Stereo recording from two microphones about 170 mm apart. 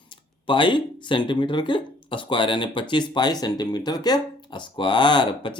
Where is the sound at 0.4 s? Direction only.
30° left (ahead or behind).